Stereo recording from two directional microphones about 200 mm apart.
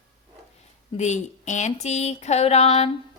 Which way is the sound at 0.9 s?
35° left (ahead or behind).